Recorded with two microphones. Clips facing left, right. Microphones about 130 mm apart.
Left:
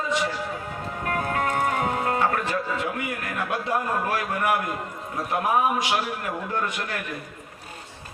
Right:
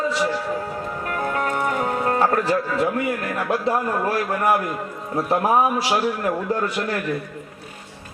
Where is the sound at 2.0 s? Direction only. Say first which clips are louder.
Right 4 dB; 35° right (ahead or behind).